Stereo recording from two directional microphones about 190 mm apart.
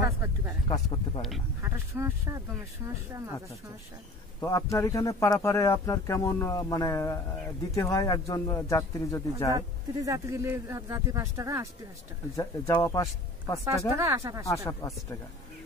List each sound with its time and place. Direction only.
0.0 s a sound: 15° right (ahead or behind)
0.7 s a sound: 35° left (ahead or behind)
1.6 s speech: 15° right (ahead or behind)
4.4 s a man's voice: 15° left (ahead or behind)
9.6 s speech: 15° right (ahead or behind)
12.4 s a man's voice: 15° left (ahead or behind)
13.7 s speech: 15° right (ahead or behind)
14.7 s a man's voice: 15° left (ahead or behind)